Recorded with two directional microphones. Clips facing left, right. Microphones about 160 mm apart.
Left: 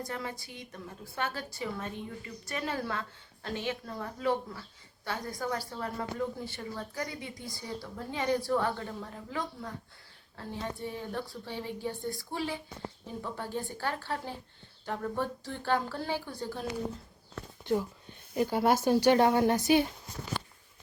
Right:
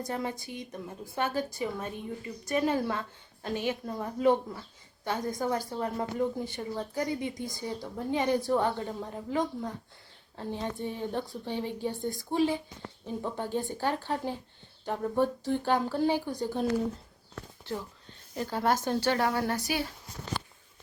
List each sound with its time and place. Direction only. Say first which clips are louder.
0.0 s a woman's voice: right 4 dB; 20° right (ahead or behind)
11.1 s a woman's voice: right 4 dB; 20° right (ahead or behind)
17.7 s a woman's voice: left 7 dB; 15° left (ahead or behind)
20.3 s walk: right 1 dB; 10° left (ahead or behind)